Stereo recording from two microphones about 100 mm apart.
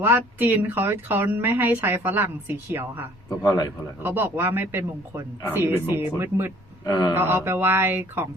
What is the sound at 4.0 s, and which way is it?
Speech, 20° right (ahead or behind).